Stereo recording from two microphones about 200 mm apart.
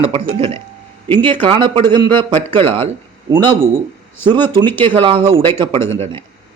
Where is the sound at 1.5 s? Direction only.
25° right (ahead or behind).